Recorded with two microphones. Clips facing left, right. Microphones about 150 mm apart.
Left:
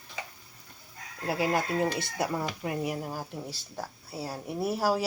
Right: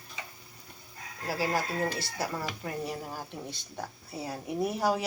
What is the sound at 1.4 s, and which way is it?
A woman's voice, 20° left (ahead or behind).